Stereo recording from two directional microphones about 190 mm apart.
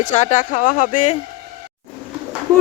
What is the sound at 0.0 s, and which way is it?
Speech, 40° left (ahead or behind).